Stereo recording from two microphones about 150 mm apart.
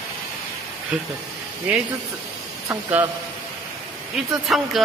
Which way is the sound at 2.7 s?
15° right (ahead or behind).